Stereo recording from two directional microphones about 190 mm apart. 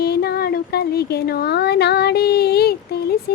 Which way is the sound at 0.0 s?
55° left (ahead or behind).